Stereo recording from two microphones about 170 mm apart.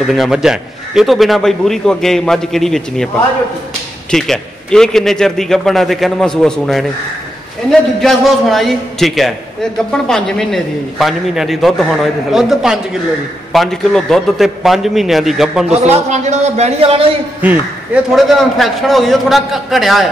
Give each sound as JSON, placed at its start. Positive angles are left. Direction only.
{"t": 0.0, "sound": "a man's voice", "side_deg": 0}
{"t": 4.1, "sound": "a man's voice", "side_deg": 5}
{"t": 8.0, "sound": "a man's voice", "side_deg": 0}
{"t": 15.7, "sound": "a man's voice", "side_deg": -40}
{"t": 17.4, "sound": "a man's voice", "side_deg": -10}